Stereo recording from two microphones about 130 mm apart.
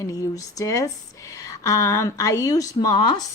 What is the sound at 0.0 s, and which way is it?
Speech, 25° left (ahead or behind).